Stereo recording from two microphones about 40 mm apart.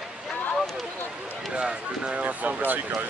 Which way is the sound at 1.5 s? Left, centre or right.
Right.